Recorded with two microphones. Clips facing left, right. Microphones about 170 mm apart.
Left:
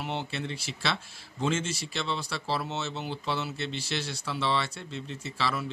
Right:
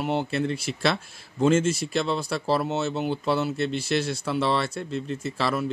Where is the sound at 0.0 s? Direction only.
45° right (ahead or behind).